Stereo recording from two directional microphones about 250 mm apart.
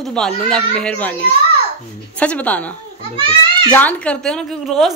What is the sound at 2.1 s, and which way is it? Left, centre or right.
Speech, centre.